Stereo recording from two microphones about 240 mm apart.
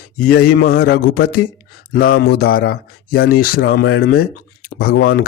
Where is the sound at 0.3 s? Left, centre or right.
Left.